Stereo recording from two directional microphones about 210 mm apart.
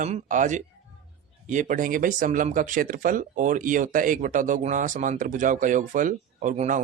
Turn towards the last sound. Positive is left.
turn(degrees=-35)  # may be behind; listen again after turning